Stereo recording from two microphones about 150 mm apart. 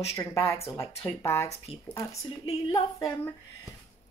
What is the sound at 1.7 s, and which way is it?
Speech, 30° left (ahead or behind).